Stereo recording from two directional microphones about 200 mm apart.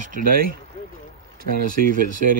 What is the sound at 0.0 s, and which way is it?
Speech, 45° right (ahead or behind).